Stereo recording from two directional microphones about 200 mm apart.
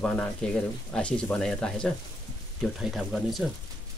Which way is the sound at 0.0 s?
5° left (ahead or behind).